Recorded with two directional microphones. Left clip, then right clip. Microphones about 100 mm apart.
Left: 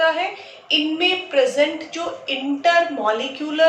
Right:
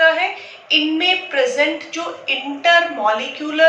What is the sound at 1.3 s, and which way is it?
A woman's voice, 25° left (ahead or behind).